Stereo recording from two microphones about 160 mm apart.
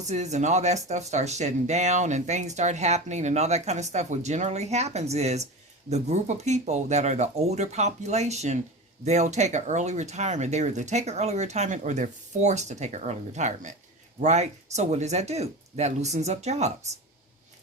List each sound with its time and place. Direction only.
0.0 s speech: 45° right (ahead or behind)